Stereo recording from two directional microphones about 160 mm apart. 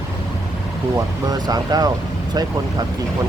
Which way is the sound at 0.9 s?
25° right (ahead or behind).